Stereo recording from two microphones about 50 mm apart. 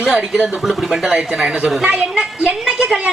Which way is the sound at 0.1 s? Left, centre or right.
Centre.